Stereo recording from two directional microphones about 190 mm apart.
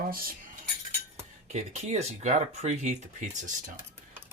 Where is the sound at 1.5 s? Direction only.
35° right (ahead or behind).